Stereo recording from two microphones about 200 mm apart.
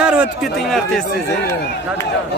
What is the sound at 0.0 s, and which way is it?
A man's voice, 5° right (ahead or behind).